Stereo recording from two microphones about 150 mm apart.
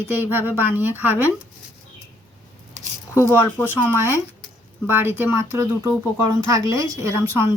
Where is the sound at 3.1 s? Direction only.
20° left (ahead or behind).